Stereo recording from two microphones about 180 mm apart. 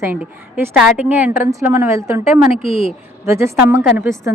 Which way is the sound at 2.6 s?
30° left (ahead or behind).